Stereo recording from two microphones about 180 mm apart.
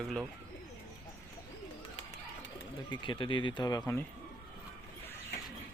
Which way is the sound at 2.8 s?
25° left (ahead or behind).